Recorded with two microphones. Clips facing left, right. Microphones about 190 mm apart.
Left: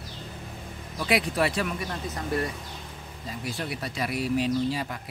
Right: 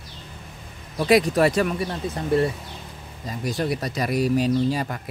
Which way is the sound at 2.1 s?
30° right (ahead or behind).